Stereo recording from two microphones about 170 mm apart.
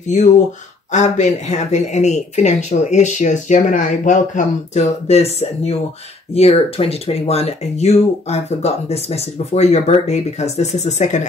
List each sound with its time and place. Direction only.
0.0 s speech: 45° left (ahead or behind)